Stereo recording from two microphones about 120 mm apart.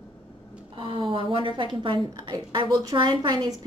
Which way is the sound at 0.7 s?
45° right (ahead or behind).